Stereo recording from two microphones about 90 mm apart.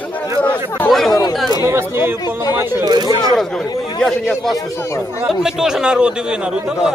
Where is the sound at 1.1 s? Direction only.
50° left (ahead or behind).